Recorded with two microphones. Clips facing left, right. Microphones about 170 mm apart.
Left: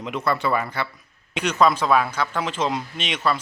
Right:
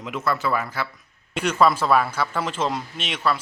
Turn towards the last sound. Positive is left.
turn(degrees=-5)  # may be behind; listen again after turning